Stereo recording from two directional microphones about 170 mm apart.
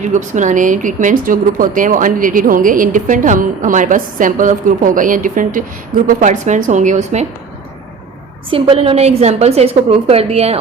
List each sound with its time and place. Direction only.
0.0 s speech: 45° right (ahead or behind)
8.4 s a woman's voice: 30° right (ahead or behind)